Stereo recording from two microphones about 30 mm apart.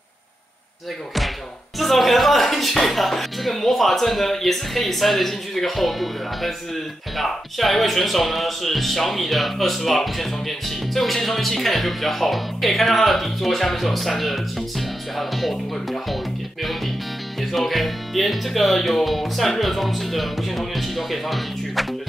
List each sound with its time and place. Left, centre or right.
1.8 s speech: centre
15.5 s speech: centre
17.4 s speech: centre